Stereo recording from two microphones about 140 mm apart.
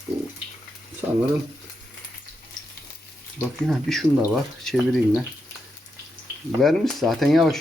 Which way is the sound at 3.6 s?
Centre (ahead or behind).